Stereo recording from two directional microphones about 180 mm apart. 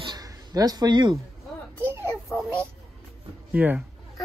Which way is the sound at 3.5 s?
10° right (ahead or behind).